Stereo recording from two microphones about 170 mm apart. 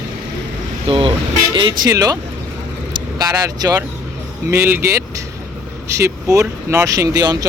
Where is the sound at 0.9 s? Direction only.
30° right (ahead or behind).